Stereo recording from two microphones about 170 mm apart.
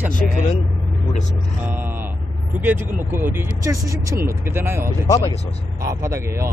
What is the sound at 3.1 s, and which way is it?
Speech, 15° right (ahead or behind).